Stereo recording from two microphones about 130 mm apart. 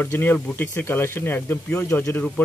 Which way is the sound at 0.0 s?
15° left (ahead or behind).